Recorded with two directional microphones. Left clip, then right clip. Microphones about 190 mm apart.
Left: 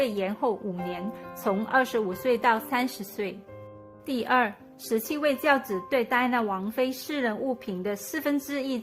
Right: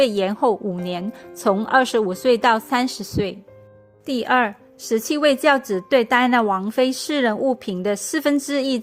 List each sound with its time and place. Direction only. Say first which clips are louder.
0.0 s a woman's voice: right 9 dB; 35° right (ahead or behind)
5.1 s a woman's voice: right 8 dB; 40° right (ahead or behind)